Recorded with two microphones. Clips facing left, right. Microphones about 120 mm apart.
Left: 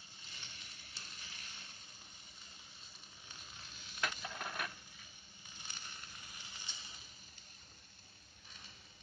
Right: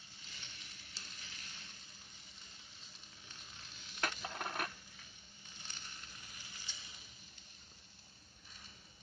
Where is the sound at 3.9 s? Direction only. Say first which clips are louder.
Right 1 dB; 40° right (ahead or behind).